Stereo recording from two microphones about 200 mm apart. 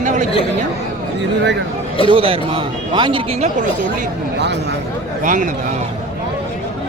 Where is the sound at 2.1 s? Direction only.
25° right (ahead or behind).